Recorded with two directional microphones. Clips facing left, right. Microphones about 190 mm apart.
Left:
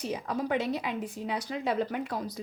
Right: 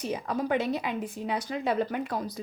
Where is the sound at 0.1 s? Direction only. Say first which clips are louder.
Right 2 dB; 55° right (ahead or behind).